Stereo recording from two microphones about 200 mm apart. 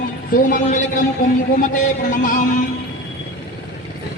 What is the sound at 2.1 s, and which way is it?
Speech, 40° left (ahead or behind).